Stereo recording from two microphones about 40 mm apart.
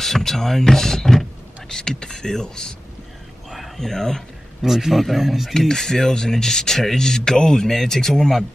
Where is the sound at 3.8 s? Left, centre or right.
Centre.